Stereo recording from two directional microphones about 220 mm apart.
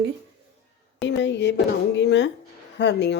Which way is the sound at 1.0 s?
55° left (ahead or behind).